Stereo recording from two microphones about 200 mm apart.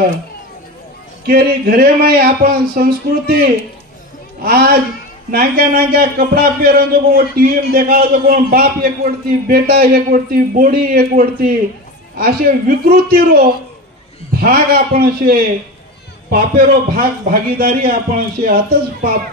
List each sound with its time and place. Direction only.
1.2 s a man's voice: 50° right (ahead or behind)
4.4 s a man's voice: 50° right (ahead or behind)